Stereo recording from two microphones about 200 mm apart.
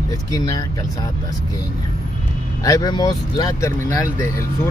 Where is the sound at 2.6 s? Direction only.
20° left (ahead or behind).